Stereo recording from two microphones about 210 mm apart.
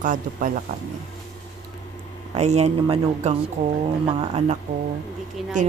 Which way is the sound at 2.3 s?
30° right (ahead or behind).